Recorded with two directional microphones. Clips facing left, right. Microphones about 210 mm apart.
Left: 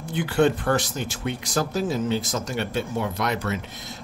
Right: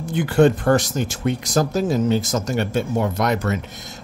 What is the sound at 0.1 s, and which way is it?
A man's voice, 45° right (ahead or behind).